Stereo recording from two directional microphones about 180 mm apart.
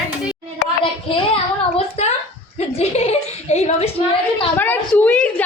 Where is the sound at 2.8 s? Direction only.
35° left (ahead or behind).